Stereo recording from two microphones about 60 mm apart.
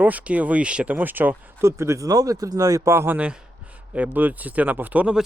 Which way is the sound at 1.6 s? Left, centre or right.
Right.